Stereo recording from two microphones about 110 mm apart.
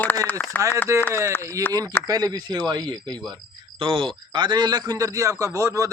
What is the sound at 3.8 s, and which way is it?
Speech, 55° right (ahead or behind).